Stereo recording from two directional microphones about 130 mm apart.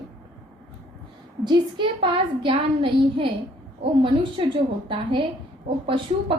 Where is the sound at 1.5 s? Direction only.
40° right (ahead or behind).